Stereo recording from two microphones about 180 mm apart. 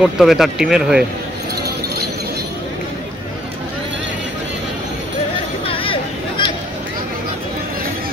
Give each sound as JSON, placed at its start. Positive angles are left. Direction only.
{"t": 0.0, "sound": "speech", "side_deg": 0}
{"t": 5.7, "sound": "chatter", "side_deg": 30}